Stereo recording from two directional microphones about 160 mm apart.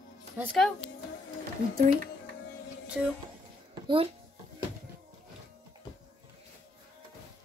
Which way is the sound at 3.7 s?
30° right (ahead or behind).